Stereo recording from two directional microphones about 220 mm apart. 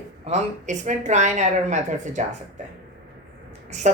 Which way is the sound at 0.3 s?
30° right (ahead or behind).